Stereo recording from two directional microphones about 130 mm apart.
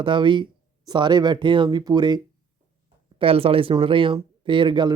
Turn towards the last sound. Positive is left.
turn(degrees=-35)  # may be behind; listen again after turning